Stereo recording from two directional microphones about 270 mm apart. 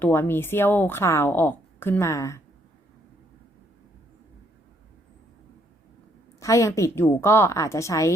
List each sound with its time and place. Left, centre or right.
0.0 s a woman's voice: centre
6.4 s a woman's voice: centre